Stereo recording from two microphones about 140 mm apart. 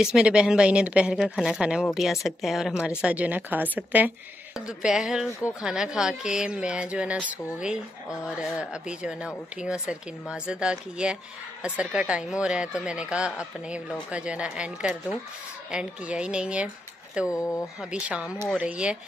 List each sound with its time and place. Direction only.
0.0 s speech: 5° right (ahead or behind)
17.3 s speech: 25° left (ahead or behind)
17.7 s speech: 5° right (ahead or behind)